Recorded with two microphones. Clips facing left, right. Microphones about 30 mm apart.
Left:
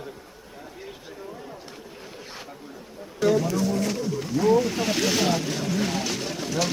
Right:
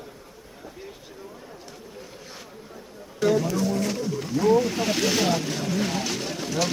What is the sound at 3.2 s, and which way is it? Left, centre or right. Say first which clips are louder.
Speech: even; centre.